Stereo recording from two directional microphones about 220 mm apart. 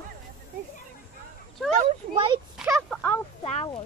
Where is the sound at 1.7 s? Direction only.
25° right (ahead or behind).